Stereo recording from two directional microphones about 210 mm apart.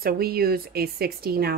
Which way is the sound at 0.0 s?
45° right (ahead or behind).